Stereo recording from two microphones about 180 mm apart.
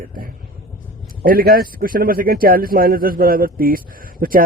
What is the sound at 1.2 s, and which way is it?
A man's voice, 55° right (ahead or behind).